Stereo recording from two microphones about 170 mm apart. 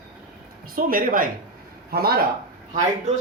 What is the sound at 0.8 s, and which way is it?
Speech, 55° right (ahead or behind).